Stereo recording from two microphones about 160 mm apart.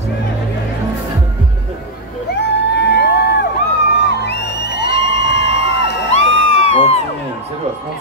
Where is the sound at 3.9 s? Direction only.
90° left.